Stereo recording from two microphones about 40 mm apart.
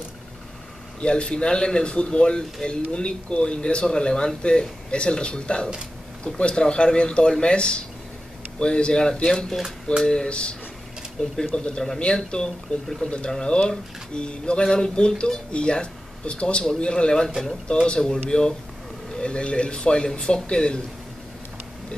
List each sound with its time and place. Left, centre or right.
1.0 s speech: left